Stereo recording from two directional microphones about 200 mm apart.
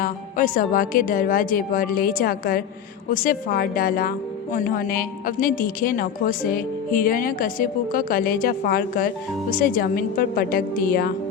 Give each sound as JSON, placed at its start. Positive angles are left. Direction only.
{"t": 0.0, "sound": "a woman's voice", "side_deg": 45}